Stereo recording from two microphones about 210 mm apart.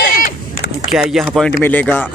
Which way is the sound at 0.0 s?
40° left (ahead or behind).